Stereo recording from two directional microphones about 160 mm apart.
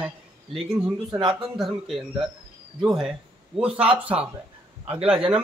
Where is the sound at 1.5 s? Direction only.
5° right (ahead or behind).